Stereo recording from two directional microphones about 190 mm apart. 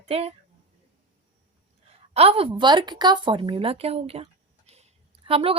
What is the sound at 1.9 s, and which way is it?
A woman's voice, 30° right (ahead or behind).